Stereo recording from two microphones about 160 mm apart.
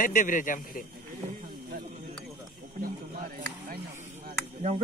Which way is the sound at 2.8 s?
60° right (ahead or behind).